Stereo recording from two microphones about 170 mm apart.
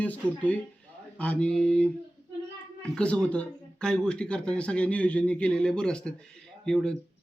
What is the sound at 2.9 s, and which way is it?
Speech, 5° left (ahead or behind).